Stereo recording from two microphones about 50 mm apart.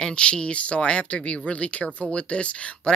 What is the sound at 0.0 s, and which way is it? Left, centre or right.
Speech, left.